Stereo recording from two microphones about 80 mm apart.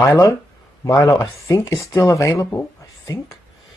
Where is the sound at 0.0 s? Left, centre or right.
Left.